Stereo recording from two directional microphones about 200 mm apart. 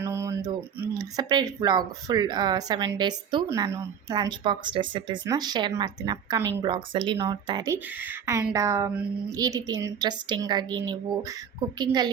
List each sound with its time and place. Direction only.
0.0 s speech: 15° right (ahead or behind)